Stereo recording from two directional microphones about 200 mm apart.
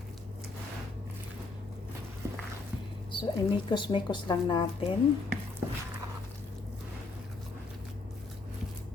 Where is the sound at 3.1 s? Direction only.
25° left (ahead or behind).